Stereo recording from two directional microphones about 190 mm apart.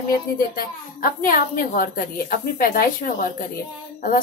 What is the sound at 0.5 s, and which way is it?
A woman's voice, 50° left (ahead or behind).